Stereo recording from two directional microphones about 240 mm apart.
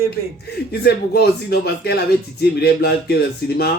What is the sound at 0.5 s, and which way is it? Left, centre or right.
Speech, left.